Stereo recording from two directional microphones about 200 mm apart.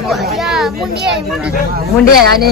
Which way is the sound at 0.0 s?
Centre (ahead or behind).